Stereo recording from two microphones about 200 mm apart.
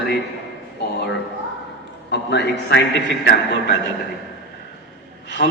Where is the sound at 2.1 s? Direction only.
60° left (ahead or behind).